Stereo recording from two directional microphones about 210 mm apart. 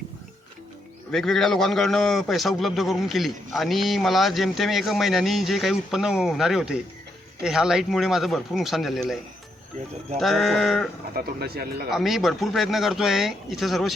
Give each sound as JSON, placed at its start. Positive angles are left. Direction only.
{"t": 1.1, "sound": "a man's voice", "side_deg": 0}
{"t": 10.2, "sound": "a man's voice", "side_deg": 0}
{"t": 11.1, "sound": "speech", "side_deg": -45}
{"t": 11.9, "sound": "a man's voice", "side_deg": 0}